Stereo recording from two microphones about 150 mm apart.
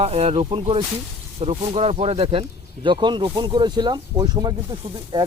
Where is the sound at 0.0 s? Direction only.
45° right (ahead or behind).